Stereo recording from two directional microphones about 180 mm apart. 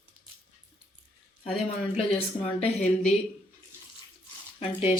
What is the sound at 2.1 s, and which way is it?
Speech, 35° left (ahead or behind).